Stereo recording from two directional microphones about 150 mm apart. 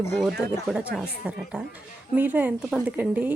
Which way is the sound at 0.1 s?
Centre (ahead or behind).